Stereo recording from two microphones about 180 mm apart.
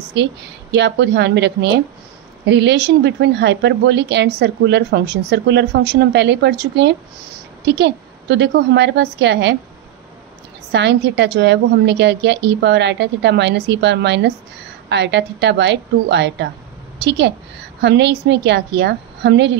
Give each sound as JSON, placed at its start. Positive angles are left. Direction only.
{"t": 0.1, "sound": "a woman's voice", "side_deg": -75}
{"t": 10.7, "sound": "a woman's voice", "side_deg": -70}